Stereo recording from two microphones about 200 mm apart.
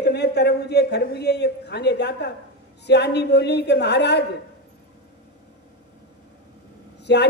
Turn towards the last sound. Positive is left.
turn(degrees=60)  # may be behind; listen again after turning